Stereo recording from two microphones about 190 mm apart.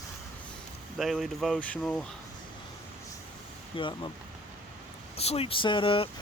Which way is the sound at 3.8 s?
25° left (ahead or behind).